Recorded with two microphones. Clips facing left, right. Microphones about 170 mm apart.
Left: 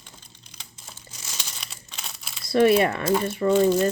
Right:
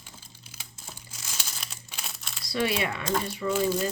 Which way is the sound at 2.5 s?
50° left (ahead or behind).